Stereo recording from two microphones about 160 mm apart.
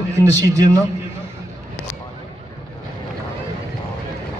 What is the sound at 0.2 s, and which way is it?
Speech, 20° right (ahead or behind).